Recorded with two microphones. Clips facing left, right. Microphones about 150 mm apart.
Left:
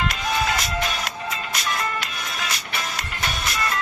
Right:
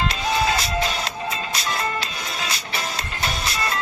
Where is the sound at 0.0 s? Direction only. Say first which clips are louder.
Right 2 dB; 30° right (ahead or behind).